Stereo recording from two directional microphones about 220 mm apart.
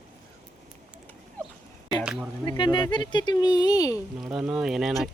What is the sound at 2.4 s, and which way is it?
Speech, 20° left (ahead or behind).